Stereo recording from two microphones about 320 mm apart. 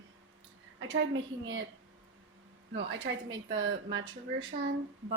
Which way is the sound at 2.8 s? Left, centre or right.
Right.